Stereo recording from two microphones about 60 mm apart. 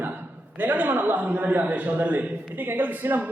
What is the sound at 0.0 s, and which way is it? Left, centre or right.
A man's voice, right.